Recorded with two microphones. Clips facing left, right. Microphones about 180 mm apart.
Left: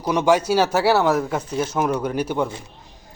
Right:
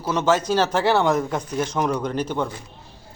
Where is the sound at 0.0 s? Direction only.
15° left (ahead or behind).